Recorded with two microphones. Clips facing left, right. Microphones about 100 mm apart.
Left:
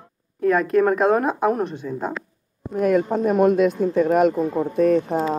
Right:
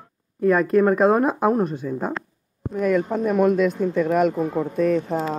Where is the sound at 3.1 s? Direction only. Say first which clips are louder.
Left 1 dB; 40° left (ahead or behind).